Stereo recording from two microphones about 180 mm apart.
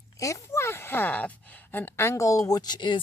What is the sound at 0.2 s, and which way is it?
Speech, 15° left (ahead or behind).